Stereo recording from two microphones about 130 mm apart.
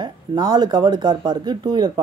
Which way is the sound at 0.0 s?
35° right (ahead or behind).